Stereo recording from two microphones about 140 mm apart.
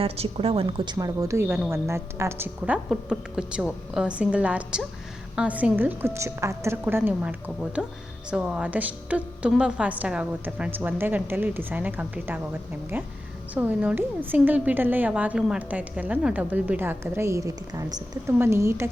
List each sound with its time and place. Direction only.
0.0 s speech: 45° right (ahead or behind)
0.9 s a woman's voice: 25° right (ahead or behind)
13.5 s a woman's voice: 10° right (ahead or behind)